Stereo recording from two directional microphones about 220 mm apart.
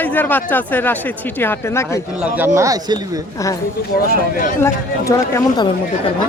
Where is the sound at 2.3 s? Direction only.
10° right (ahead or behind).